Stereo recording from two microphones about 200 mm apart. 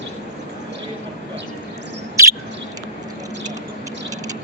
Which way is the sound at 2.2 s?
15° right (ahead or behind).